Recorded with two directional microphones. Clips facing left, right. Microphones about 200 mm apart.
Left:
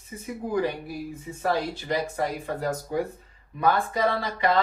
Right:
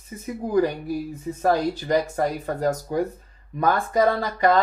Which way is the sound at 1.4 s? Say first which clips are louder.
Right 5 dB; 45° right (ahead or behind).